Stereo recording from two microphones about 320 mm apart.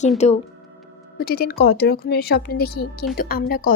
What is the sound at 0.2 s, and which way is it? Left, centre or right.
A woman's voice, left.